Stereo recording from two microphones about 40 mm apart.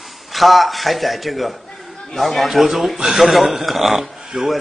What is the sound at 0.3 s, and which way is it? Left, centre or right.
A man's voice, centre.